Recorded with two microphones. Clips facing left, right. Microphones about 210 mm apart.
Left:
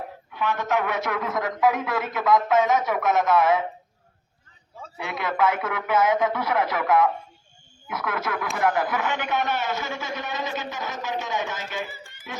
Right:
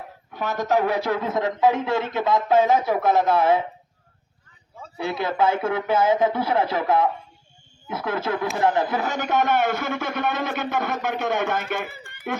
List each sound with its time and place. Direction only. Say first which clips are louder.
0.3 s a man's voice: right 2 dB; 40° right (ahead or behind)
4.9 s a man's voice: right 3 dB; 30° right (ahead or behind); by 12.4 s 60° right (ahead or behind)